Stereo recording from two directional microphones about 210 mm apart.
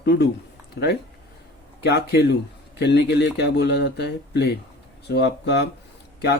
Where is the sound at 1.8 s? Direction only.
55° left (ahead or behind).